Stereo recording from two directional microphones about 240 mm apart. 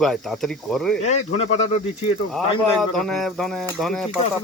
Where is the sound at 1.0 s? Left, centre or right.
Left.